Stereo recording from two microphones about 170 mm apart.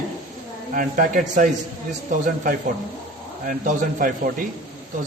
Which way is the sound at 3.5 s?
55° right (ahead or behind).